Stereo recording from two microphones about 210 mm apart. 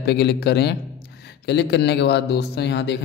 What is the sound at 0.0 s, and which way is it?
Speech, 50° left (ahead or behind).